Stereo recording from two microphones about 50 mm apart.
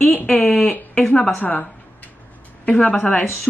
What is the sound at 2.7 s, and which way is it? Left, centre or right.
Speech, left.